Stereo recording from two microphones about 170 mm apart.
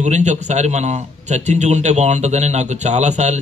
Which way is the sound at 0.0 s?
45° right (ahead or behind).